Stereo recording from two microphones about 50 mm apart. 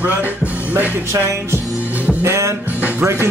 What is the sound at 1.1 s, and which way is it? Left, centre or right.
Music, right.